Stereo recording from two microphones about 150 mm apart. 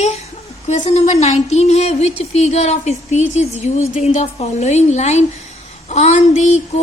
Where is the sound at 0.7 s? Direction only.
45° left (ahead or behind).